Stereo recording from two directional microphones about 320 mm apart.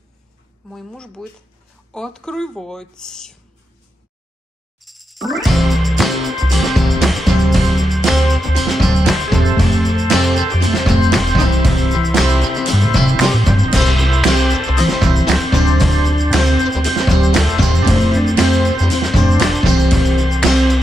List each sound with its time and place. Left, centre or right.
0.7 s a woman's voice: centre
4.8 s music: centre